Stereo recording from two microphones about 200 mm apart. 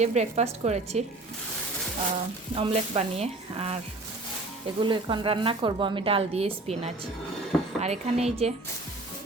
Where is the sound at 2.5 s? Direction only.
25° right (ahead or behind).